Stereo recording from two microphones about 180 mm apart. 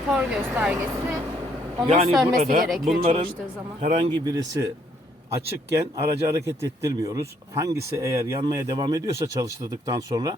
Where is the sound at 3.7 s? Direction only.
35° right (ahead or behind).